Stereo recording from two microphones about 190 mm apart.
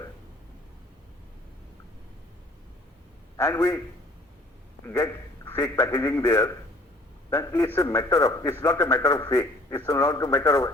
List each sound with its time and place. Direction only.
3.3 s a man's voice: 15° left (ahead or behind)
4.9 s a man's voice: 15° left (ahead or behind)